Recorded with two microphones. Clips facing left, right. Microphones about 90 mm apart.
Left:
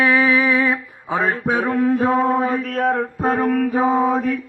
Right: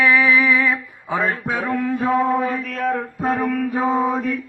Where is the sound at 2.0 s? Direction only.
20° left (ahead or behind).